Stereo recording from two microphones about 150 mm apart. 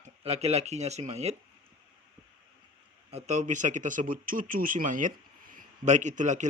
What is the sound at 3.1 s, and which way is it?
Speech, 50° right (ahead or behind).